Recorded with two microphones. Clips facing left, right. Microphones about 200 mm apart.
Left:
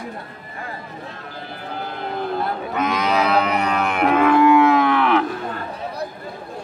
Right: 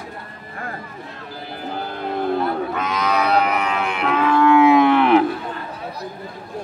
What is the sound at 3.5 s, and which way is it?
Music, 40° left (ahead or behind).